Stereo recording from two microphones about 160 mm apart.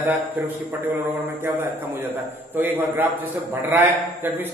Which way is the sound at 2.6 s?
15° right (ahead or behind).